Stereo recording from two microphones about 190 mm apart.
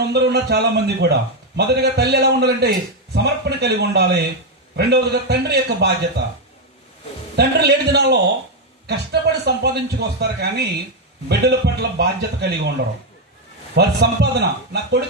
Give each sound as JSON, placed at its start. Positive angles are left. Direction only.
{"t": 0.0, "sound": "a man's voice", "side_deg": -60}
{"t": 7.3, "sound": "a man's voice", "side_deg": -60}
{"t": 9.4, "sound": "a man's voice", "side_deg": -60}
{"t": 13.7, "sound": "a man's voice", "side_deg": -60}